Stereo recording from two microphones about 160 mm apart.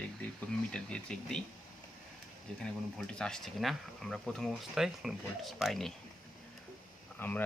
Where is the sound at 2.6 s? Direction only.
5° left (ahead or behind).